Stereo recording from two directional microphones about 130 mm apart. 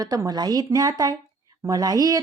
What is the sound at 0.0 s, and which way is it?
A woman's voice, 30° right (ahead or behind).